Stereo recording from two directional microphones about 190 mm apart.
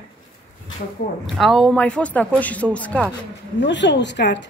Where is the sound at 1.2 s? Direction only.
Centre (ahead or behind).